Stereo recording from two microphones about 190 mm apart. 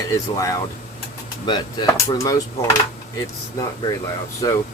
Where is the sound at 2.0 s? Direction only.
15° left (ahead or behind).